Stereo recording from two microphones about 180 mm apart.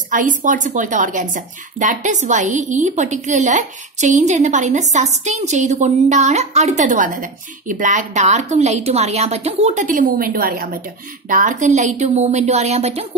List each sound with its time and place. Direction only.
0.1 s a woman's voice: 45° right (ahead or behind)